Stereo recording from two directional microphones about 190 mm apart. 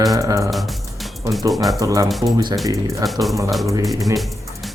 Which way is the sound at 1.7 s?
15° right (ahead or behind).